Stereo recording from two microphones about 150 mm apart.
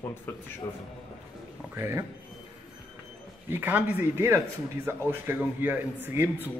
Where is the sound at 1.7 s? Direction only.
15° right (ahead or behind).